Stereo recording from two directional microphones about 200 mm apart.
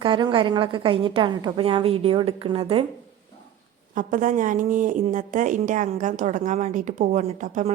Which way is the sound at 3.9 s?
40° right (ahead or behind).